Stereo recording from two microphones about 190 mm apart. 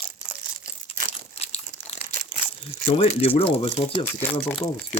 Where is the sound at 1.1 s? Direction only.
35° left (ahead or behind).